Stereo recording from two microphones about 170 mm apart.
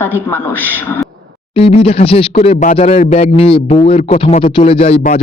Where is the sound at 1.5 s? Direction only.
35° left (ahead or behind).